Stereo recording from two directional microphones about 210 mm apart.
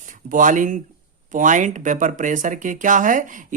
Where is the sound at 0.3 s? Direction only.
40° right (ahead or behind).